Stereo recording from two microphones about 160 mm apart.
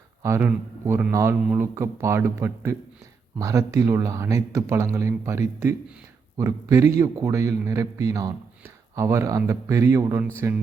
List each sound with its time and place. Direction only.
0.2 s speech: 15° right (ahead or behind)